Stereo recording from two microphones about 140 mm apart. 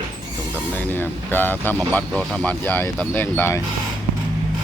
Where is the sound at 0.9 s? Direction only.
15° left (ahead or behind).